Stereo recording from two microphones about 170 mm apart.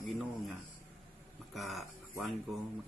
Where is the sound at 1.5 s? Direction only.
Centre (ahead or behind).